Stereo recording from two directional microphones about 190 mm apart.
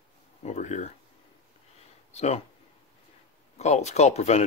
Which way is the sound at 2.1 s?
35° left (ahead or behind).